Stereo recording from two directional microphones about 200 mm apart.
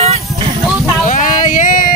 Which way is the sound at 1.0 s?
40° left (ahead or behind).